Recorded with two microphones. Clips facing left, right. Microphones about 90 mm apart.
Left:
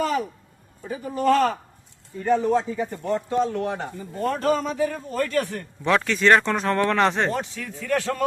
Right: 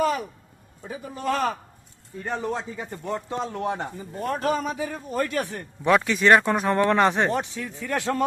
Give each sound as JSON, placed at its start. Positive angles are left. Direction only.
{"t": 0.9, "sound": "a man's voice", "side_deg": -5}
{"t": 3.2, "sound": "speech", "side_deg": -20}
{"t": 4.2, "sound": "a man's voice", "side_deg": -5}